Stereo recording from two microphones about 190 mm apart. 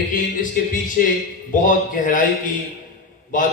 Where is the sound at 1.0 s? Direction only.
45° left (ahead or behind).